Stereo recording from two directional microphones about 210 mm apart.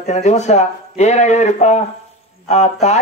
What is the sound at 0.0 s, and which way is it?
Speech, 35° left (ahead or behind).